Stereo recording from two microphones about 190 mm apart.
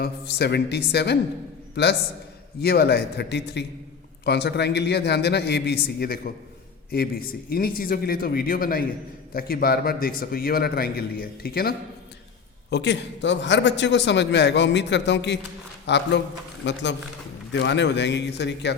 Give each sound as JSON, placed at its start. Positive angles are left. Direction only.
{"t": 0.0, "sound": "a man's voice", "side_deg": 60}
{"t": 12.7, "sound": "a man's voice", "side_deg": 65}